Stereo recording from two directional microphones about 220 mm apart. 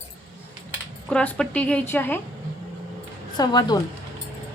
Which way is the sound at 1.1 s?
5° left (ahead or behind).